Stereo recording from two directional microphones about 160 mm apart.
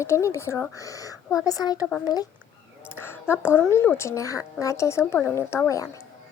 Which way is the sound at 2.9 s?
15° left (ahead or behind).